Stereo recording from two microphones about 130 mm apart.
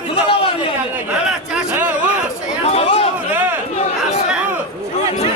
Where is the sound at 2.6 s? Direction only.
50° left (ahead or behind).